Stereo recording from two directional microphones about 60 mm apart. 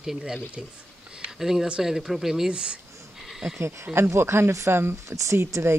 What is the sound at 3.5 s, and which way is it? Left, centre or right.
Speech, right.